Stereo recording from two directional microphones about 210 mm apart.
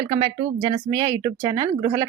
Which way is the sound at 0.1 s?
25° right (ahead or behind).